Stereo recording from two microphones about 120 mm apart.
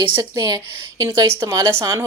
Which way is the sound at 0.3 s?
35° right (ahead or behind).